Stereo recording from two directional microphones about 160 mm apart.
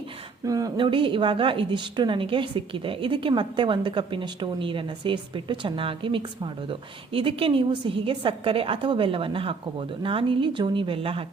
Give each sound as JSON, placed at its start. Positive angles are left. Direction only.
{"t": 0.4, "sound": "a woman's voice", "side_deg": -20}